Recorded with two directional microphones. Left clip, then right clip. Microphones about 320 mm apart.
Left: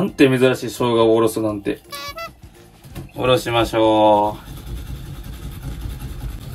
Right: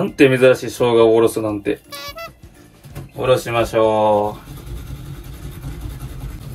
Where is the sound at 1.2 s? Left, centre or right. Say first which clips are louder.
Right 2 dB; centre.